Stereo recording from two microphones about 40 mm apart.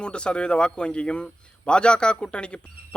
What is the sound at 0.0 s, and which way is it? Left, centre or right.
Speech, left.